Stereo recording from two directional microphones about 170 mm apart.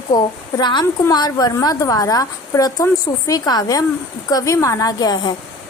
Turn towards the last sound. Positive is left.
turn(degrees=25)  # may be behind; listen again after turning